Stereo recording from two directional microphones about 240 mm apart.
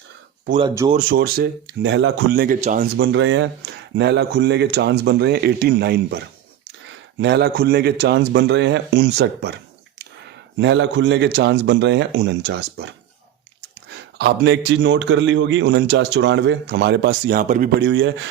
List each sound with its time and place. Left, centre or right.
0.6 s speech: centre
0.9 s speech: right
3.0 s a man's voice: right
10.6 s a man's voice: right
14.2 s a man's voice: right